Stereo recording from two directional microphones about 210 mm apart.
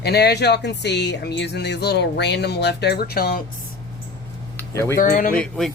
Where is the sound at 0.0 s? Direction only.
50° left (ahead or behind).